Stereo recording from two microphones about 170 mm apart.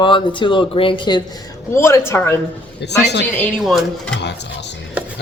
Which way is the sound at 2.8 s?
80° left.